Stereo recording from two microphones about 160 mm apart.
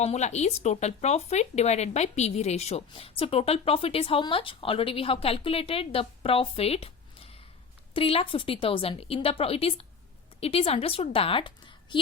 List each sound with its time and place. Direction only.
0.0 s a woman's voice: 45° left (ahead or behind)